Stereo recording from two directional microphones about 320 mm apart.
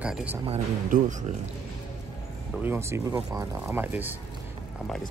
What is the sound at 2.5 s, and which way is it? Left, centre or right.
Speech, centre.